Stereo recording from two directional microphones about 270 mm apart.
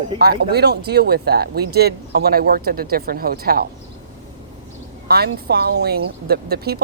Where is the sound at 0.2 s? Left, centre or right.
Right.